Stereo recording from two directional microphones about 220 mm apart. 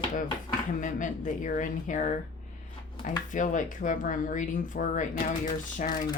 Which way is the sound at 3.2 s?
35° left (ahead or behind).